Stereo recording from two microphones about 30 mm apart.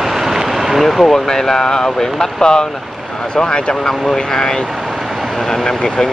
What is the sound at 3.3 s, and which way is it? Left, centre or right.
Speech, left.